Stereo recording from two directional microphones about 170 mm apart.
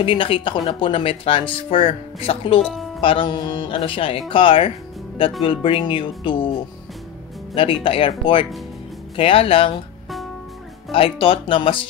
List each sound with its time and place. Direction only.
0.0 s speech: 30° left (ahead or behind)
2.6 s speech: centre (ahead or behind)
3.0 s speech: 30° left (ahead or behind)
7.5 s speech: 30° left (ahead or behind)
10.9 s speech: 30° left (ahead or behind)